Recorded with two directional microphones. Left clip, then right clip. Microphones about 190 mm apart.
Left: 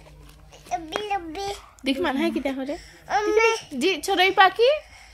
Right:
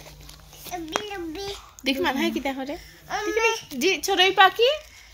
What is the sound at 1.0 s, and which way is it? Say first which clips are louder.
Child singing: left 5 dB; 60° left (ahead or behind).